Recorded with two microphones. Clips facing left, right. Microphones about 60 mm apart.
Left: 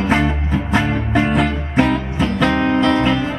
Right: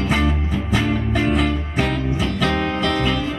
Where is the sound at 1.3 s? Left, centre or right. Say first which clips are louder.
Left 4 dB; centre.